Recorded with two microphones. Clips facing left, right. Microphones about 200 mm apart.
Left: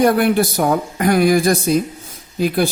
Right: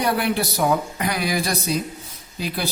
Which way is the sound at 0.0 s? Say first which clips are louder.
Left 8 dB; 50° left (ahead or behind).